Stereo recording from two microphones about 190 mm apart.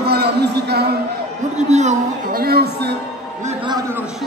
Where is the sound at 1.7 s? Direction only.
35° right (ahead or behind).